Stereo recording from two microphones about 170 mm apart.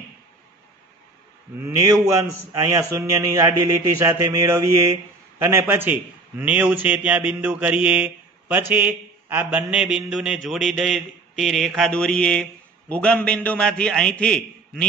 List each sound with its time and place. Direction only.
1.6 s a man's voice: 20° right (ahead or behind); by 14.9 s 5° left (ahead or behind)